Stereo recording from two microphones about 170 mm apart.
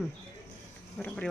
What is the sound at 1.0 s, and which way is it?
Speech, 5° left (ahead or behind).